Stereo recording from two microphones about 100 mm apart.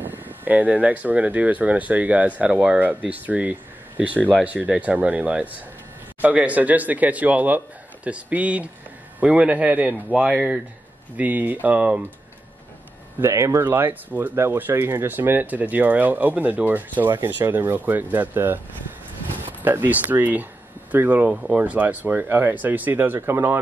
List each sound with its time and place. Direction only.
0.0 s speech: 20° right (ahead or behind)
13.2 s speech: 30° right (ahead or behind)
19.6 s speech: 20° right (ahead or behind)